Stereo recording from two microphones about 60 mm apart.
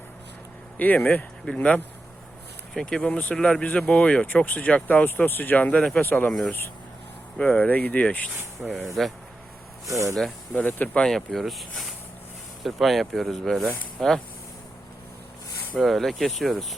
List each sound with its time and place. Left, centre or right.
0.8 s speech: left
2.7 s speech: centre
3.1 s speech: left
3.3 s speech: centre
3.6 s speech: left
5.0 s speech: left
7.3 s speech: left
8.6 s speech: centre
9.8 s speech: right
10.5 s speech: left
11.0 s speech: centre
15.8 s speech: centre